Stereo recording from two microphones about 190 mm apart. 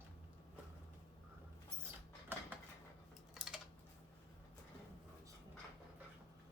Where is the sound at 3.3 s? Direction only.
Centre (ahead or behind).